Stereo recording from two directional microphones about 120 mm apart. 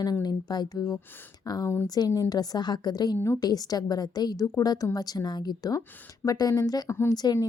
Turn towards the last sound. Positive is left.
turn(degrees=35)  # may be behind; listen again after turning